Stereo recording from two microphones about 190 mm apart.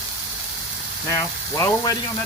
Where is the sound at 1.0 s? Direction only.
15° left (ahead or behind).